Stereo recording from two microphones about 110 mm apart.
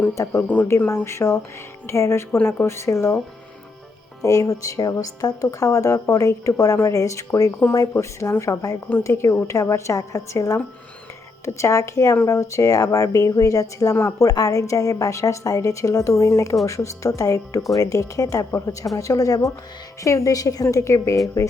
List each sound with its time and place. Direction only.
0.1 s a woman's voice: 30° left (ahead or behind)
0.4 s speech: 15° left (ahead or behind)
0.9 s a woman's voice: 25° left (ahead or behind)
4.2 s a woman's voice: 30° left (ahead or behind)